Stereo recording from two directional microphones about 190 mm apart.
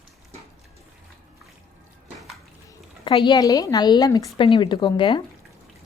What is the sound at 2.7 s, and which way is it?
Speech, 25° left (ahead or behind).